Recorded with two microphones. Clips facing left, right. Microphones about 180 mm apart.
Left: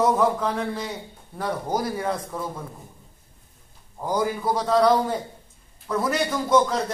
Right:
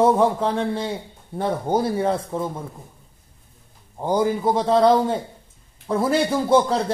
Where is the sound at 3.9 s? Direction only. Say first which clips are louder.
Right 4 dB; 25° right (ahead or behind).